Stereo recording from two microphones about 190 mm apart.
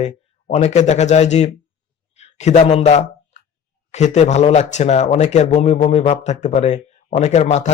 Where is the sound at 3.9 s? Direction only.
35° left (ahead or behind).